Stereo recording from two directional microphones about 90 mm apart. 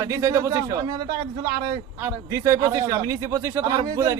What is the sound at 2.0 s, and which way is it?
Speech, 35° right (ahead or behind).